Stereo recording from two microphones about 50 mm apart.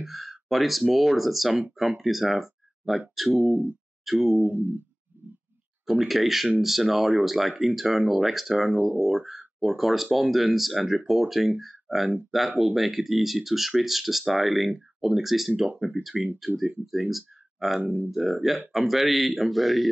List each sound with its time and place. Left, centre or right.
0.0 s speech: centre
3.3 s speech: right
5.9 s speech: centre
8.6 s speech: centre
9.6 s speech: centre